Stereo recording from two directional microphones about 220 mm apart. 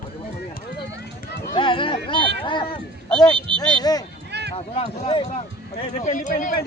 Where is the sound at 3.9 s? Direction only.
15° left (ahead or behind).